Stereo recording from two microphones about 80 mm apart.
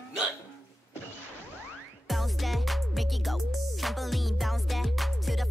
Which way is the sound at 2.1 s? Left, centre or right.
Centre.